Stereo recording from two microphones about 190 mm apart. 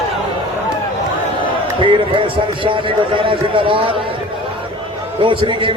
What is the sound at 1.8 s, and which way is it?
A man's voice, 25° right (ahead or behind).